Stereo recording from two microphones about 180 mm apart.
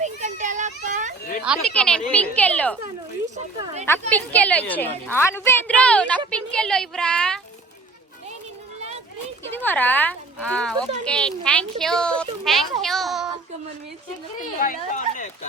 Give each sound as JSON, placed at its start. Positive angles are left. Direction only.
{"t": 0.0, "sound": "children playing", "side_deg": -40}
{"t": 1.4, "sound": "speech", "side_deg": -5}
{"t": 1.7, "sound": "a woman's voice", "side_deg": 5}
{"t": 4.1, "sound": "a woman's voice", "side_deg": 10}
{"t": 9.4, "sound": "speech", "side_deg": 10}
{"t": 14.6, "sound": "speech", "side_deg": 45}